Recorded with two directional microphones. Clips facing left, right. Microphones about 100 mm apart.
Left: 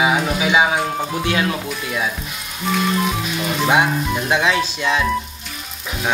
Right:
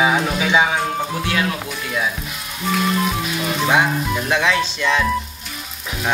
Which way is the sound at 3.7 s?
20° left (ahead or behind).